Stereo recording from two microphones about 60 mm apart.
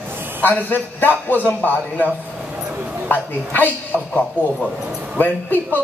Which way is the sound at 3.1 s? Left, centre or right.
Left.